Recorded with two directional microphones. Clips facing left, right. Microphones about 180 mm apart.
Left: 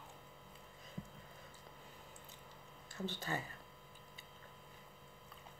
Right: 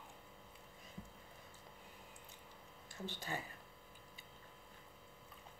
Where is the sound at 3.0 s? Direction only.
15° right (ahead or behind).